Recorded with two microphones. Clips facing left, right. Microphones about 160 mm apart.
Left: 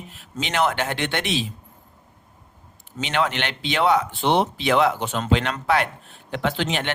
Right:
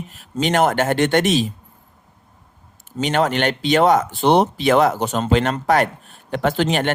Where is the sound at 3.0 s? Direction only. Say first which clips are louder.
Right 5 dB; 45° right (ahead or behind).